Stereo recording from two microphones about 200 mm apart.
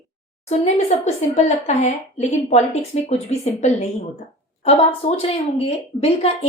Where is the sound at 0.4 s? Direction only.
35° left (ahead or behind).